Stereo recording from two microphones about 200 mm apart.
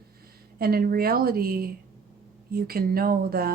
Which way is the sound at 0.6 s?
50° right (ahead or behind).